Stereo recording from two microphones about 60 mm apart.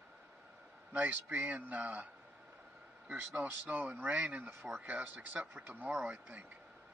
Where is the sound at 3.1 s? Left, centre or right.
Right.